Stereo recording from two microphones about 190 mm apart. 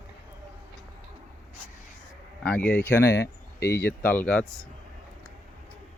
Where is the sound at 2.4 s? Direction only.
5° left (ahead or behind).